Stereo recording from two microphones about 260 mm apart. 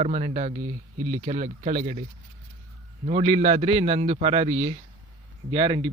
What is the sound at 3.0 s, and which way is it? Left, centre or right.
A man's voice, right.